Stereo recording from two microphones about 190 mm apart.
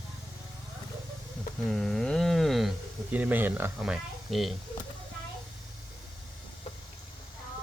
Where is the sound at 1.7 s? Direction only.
Centre (ahead or behind).